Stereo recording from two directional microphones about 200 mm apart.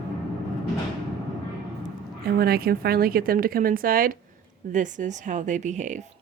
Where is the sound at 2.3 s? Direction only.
50° right (ahead or behind).